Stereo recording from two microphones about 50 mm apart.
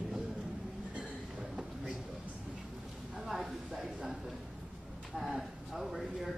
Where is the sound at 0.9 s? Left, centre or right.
Right.